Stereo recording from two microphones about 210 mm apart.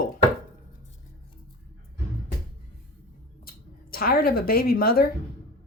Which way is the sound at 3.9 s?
45° left (ahead or behind).